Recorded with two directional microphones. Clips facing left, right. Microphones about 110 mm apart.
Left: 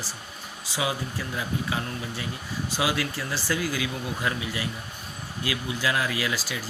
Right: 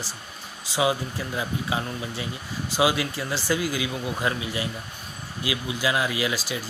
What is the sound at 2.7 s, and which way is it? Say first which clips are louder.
Speech: right 5 dB; 20° right (ahead or behind).